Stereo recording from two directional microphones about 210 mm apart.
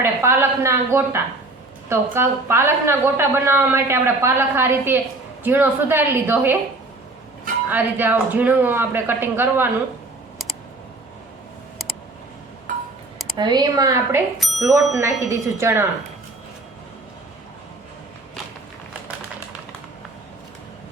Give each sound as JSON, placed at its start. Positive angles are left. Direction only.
{"t": 0.0, "sound": "a woman's voice", "side_deg": -10}
{"t": 7.7, "sound": "a woman's voice", "side_deg": -10}
{"t": 13.3, "sound": "speech", "side_deg": -20}
{"t": 14.3, "sound": "speech", "side_deg": 0}
{"t": 14.9, "sound": "a woman's voice", "side_deg": -15}